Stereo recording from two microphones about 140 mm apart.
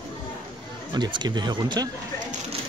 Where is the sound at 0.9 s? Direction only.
35° right (ahead or behind).